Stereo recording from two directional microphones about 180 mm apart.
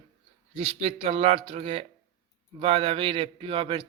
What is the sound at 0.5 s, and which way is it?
A man's voice, 35° right (ahead or behind).